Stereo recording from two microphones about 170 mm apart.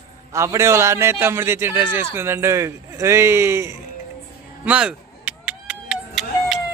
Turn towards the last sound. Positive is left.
turn(degrees=-5)  # may be behind; listen again after turning